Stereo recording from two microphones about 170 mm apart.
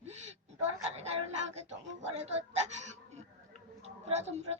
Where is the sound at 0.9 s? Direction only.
40° right (ahead or behind).